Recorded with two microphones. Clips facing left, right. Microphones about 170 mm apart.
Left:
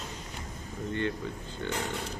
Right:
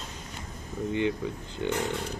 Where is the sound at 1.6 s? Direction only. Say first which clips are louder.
Right 5 dB; 15° right (ahead or behind).